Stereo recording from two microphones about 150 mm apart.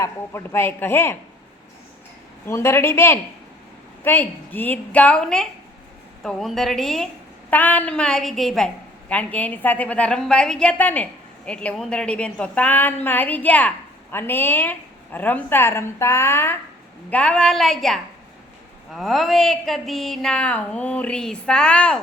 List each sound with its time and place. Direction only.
0.0 s a woman's voice: 15° left (ahead or behind)
2.5 s a woman's voice: 15° left (ahead or behind)